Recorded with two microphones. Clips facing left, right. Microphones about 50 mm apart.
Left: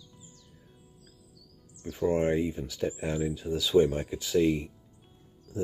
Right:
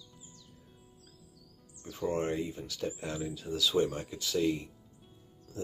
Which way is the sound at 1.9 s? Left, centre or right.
Centre.